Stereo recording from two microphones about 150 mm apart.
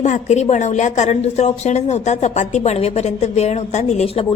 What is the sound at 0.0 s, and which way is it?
A woman's voice, 50° left (ahead or behind).